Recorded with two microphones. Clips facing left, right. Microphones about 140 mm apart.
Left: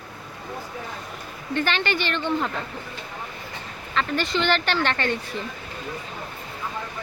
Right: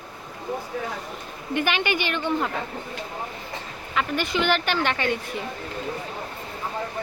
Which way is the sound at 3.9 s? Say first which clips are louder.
Left 1 dB; 10° right (ahead or behind).